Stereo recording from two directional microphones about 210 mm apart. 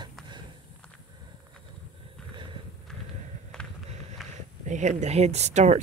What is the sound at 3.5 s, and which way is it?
Run, centre (ahead or behind).